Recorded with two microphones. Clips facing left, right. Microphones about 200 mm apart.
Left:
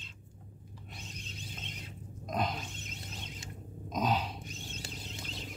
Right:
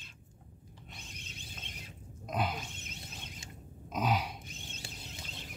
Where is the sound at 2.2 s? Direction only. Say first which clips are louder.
Left 1 dB; 5° right (ahead or behind).